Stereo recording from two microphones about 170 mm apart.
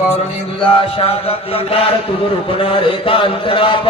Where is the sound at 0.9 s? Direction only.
35° left (ahead or behind).